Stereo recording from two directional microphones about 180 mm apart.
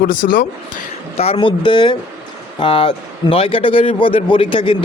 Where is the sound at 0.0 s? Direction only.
50° left (ahead or behind).